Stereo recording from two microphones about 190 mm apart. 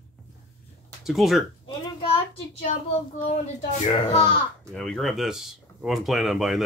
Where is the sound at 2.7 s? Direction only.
40° left (ahead or behind).